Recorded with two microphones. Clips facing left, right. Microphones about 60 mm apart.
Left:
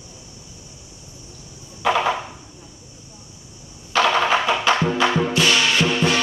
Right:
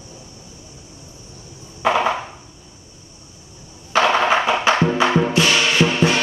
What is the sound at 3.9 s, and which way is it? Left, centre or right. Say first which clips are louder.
Wood block: right 2 dB; right.